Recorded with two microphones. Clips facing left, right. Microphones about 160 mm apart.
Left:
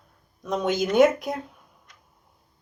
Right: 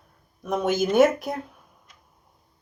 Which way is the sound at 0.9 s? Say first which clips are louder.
Left 1 dB; 20° left (ahead or behind).